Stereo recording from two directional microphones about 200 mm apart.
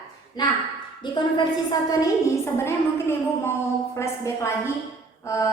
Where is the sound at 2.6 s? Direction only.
10° left (ahead or behind).